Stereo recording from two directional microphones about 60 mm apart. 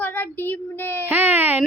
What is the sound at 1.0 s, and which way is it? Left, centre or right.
Speech, right.